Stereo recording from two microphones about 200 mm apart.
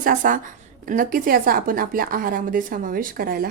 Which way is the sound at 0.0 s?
40° right (ahead or behind).